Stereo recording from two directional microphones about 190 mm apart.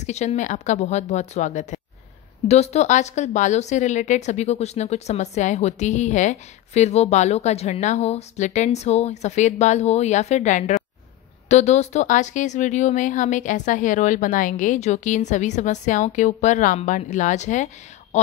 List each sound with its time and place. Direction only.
0.0 s speech: 35° left (ahead or behind)